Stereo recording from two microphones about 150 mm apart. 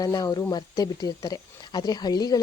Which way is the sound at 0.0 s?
25° left (ahead or behind).